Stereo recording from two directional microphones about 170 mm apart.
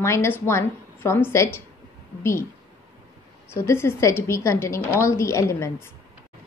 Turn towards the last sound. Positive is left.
turn(degrees=15)  # may be behind; listen again after turning